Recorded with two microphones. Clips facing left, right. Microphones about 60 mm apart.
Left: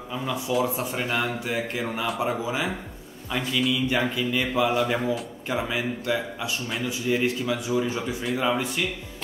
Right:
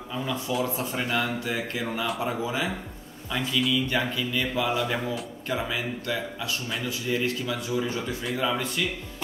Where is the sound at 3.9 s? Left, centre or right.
Centre.